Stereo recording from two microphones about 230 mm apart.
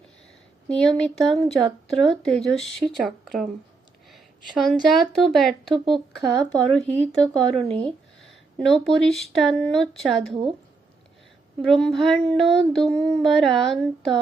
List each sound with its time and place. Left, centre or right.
0.7 s child singing: centre
4.1 s a woman's voice: centre
5.9 s child singing: centre
7.3 s speech: right
7.9 s speech: centre
11.6 s child singing: centre